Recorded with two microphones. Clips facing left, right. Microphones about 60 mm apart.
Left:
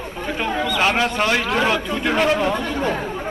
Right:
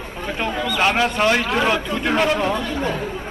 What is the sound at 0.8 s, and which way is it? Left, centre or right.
Speech, centre.